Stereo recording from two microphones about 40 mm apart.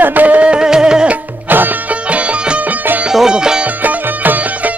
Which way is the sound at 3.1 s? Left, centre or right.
Centre.